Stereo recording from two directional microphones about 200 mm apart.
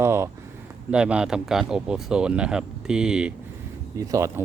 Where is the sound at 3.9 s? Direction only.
15° right (ahead or behind).